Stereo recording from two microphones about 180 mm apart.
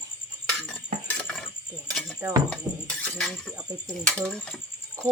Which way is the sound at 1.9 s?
Centre (ahead or behind).